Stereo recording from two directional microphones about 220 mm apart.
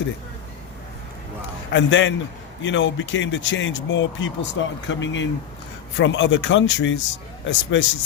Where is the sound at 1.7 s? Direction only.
55° left (ahead or behind).